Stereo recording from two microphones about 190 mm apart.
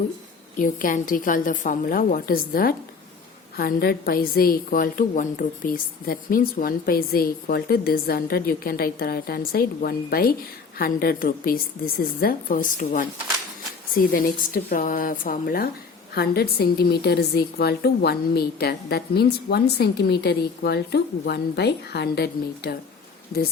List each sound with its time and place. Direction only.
0.6 s a woman's voice: 45° left (ahead or behind)